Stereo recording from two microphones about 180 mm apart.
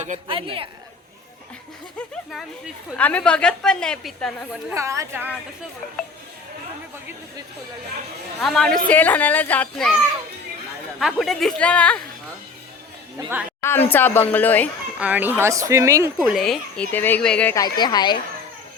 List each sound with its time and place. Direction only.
0.3 s a woman's voice: 30° right (ahead or behind)
3.0 s a woman's voice: 10° left (ahead or behind)
4.7 s speech: 15° right (ahead or behind)
8.4 s speech: 5° left (ahead or behind)
11.0 s a woman's voice: centre (ahead or behind)
13.6 s speech: 10° left (ahead or behind)
14.9 s speech: 10° right (ahead or behind)
16.1 s a woman's voice: 5° right (ahead or behind)
17.5 s a woman's voice: 20° left (ahead or behind)